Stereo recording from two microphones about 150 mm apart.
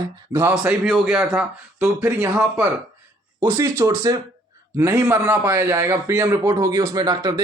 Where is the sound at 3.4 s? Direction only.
30° right (ahead or behind).